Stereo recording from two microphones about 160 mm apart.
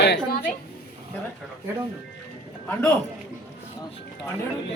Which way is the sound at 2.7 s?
10° left (ahead or behind).